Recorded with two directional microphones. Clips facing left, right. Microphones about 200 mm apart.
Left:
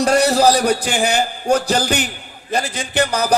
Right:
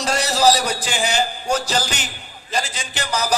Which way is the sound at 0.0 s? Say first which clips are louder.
Left 5 dB; 55° left (ahead or behind).